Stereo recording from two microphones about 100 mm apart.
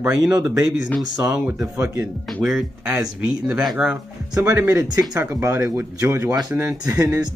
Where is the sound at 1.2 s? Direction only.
10° right (ahead or behind).